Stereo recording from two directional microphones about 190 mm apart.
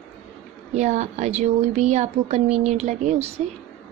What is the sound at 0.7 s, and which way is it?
Speech, 35° right (ahead or behind).